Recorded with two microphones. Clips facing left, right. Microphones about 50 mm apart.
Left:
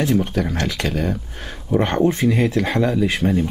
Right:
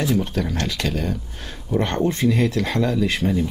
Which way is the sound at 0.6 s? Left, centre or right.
Centre.